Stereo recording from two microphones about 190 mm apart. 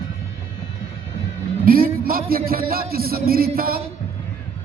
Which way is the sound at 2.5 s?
50° right (ahead or behind).